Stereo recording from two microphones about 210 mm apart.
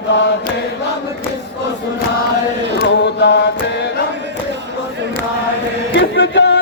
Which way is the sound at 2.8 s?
55° left (ahead or behind).